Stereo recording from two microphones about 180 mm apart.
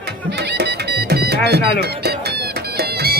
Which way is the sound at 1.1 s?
60° right (ahead or behind).